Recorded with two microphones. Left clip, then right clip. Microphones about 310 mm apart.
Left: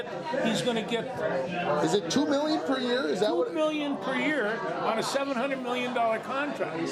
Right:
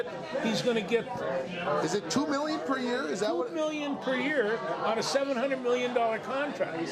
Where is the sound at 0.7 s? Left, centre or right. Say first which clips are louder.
Right 1 dB; right.